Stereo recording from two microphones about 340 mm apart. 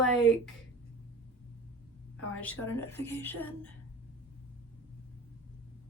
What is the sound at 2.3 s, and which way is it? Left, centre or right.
Speech, centre.